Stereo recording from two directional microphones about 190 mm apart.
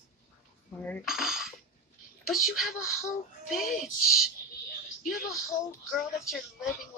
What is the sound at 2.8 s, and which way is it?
Speech, 15° left (ahead or behind).